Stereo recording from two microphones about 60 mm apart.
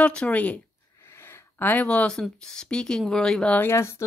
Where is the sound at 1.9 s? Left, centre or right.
Centre.